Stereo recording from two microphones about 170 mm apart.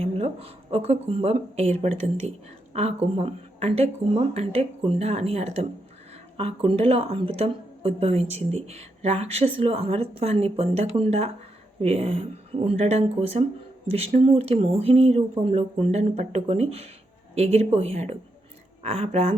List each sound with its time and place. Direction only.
0.0 s a woman's voice: 35° right (ahead or behind)